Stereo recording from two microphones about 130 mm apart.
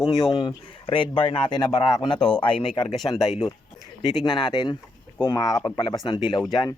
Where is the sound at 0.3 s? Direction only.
40° left (ahead or behind).